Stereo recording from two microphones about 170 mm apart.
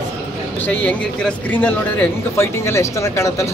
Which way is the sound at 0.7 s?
10° left (ahead or behind).